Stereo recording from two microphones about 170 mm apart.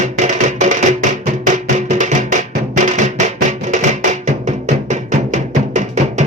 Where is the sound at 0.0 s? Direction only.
45° right (ahead or behind).